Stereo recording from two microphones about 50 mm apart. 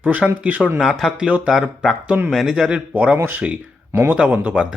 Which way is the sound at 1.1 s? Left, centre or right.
Right.